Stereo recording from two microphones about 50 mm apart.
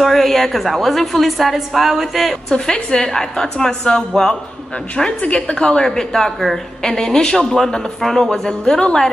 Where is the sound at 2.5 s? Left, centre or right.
Centre.